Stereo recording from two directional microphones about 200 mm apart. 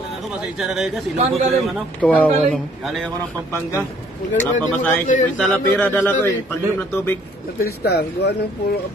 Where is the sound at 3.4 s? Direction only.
15° left (ahead or behind).